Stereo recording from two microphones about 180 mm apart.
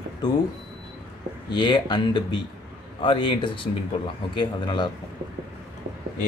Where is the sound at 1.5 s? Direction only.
25° left (ahead or behind).